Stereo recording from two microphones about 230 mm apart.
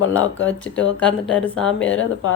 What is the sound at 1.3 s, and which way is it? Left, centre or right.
Speech, centre.